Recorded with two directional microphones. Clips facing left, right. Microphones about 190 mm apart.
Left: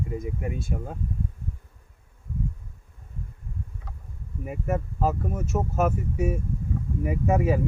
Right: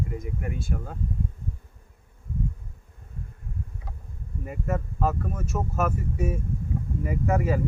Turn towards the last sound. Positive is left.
turn(degrees=15)  # may be behind; listen again after turning